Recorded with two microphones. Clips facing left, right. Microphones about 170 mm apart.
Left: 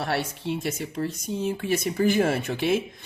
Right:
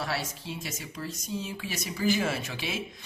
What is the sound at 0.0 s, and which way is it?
Speech, 60° left (ahead or behind).